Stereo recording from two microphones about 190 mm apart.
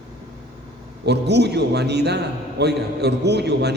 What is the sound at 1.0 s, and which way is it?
A man's voice, 60° right (ahead or behind).